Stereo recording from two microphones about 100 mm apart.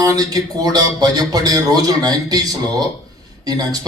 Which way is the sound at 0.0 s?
40° right (ahead or behind).